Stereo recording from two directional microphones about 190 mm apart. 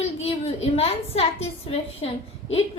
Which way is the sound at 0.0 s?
30° left (ahead or behind).